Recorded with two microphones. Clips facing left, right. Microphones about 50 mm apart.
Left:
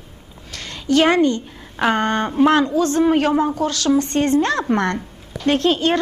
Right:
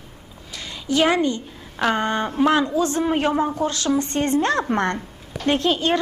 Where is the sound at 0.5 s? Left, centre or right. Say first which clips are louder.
Left 5 dB; left.